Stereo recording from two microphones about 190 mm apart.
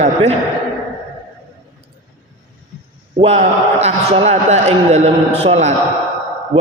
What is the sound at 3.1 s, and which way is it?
A man's voice, 30° right (ahead or behind).